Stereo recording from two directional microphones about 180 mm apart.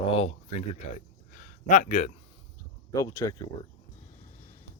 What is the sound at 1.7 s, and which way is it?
Speech, 40° left (ahead or behind).